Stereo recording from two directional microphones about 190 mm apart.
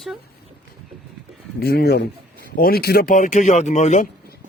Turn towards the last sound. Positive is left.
turn(degrees=40)  # may be behind; listen again after turning